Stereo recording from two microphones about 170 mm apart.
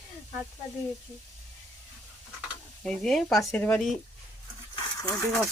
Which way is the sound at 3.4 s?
10° left (ahead or behind).